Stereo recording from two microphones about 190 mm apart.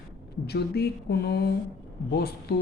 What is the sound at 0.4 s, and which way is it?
Speech, 60° left (ahead or behind).